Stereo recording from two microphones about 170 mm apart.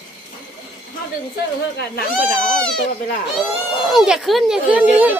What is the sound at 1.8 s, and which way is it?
Speech, 60° left (ahead or behind).